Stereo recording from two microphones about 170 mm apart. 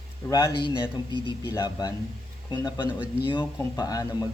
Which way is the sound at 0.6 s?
30° left (ahead or behind).